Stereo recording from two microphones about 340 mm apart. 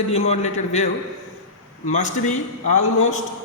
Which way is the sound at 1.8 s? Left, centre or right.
Left.